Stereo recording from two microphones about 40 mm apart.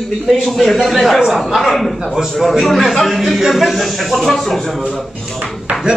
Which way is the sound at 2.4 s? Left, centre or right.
Centre.